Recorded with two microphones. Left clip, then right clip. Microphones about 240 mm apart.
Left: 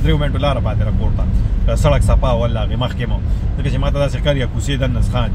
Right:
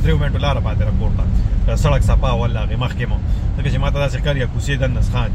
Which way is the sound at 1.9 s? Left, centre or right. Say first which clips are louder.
Left 3 dB; centre.